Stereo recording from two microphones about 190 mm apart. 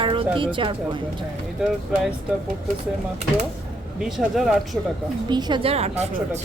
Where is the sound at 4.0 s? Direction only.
Centre (ahead or behind).